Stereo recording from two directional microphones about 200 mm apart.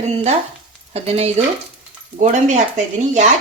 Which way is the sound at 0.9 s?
30° right (ahead or behind).